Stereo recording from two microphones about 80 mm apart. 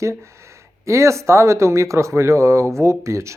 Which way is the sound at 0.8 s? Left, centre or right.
Right.